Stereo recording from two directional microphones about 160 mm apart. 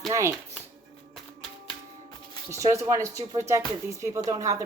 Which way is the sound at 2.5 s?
20° right (ahead or behind).